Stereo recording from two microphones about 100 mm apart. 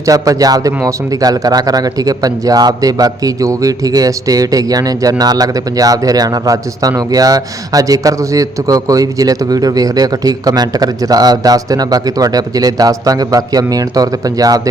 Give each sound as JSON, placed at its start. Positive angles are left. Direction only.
{"t": 0.0, "sound": "speech", "side_deg": -35}